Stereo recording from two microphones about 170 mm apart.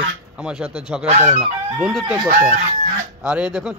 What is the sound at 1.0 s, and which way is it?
Speech, 40° right (ahead or behind).